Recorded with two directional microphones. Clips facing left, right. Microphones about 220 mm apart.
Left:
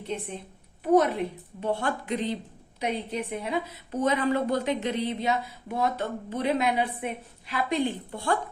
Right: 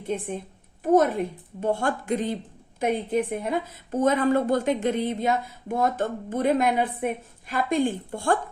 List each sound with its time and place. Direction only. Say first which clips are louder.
0.0 s a woman's voice: right 5 dB; 50° right (ahead or behind)